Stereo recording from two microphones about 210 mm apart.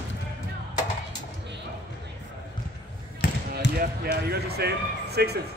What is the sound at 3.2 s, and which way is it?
Basketball bounce, 45° left (ahead or behind).